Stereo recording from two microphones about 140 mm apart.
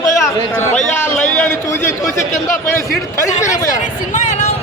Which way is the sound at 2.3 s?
70° left (ahead or behind).